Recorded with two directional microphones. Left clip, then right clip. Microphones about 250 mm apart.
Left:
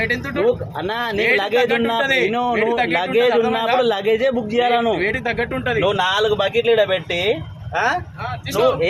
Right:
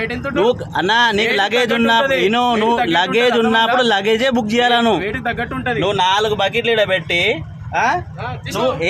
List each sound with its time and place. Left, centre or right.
0.0 s speech: centre
0.4 s a man's voice: right
5.0 s speech: centre
8.5 s speech: centre